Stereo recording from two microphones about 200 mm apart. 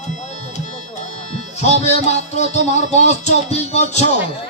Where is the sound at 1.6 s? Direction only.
35° left (ahead or behind).